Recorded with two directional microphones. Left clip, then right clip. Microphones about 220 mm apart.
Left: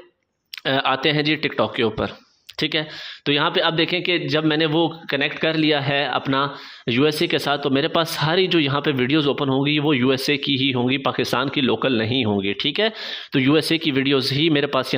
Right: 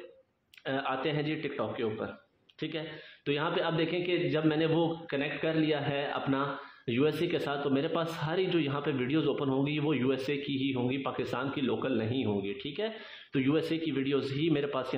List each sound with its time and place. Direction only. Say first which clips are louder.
0.7 s a man's voice: left 13 dB; 35° left (ahead or behind)